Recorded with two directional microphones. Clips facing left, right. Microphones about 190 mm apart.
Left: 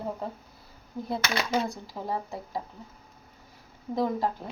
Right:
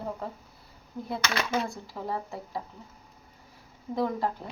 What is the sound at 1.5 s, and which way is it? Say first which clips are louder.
Speech: left 2 dB; 15° left (ahead or behind).